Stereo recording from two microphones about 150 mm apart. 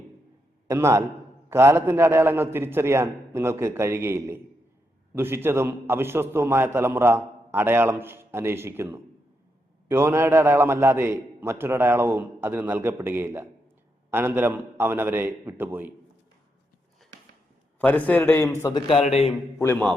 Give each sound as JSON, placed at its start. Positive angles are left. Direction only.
{"t": 0.7, "sound": "a man's voice", "side_deg": -20}
{"t": 17.7, "sound": "a man's voice", "side_deg": 10}
{"t": 18.6, "sound": "a man's voice", "side_deg": 30}
{"t": 19.0, "sound": "a man's voice", "side_deg": 45}
{"t": 19.5, "sound": "a man's voice", "side_deg": 15}